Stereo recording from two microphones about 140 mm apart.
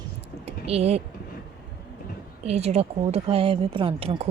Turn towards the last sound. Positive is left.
turn(degrees=-45)  # may be behind; listen again after turning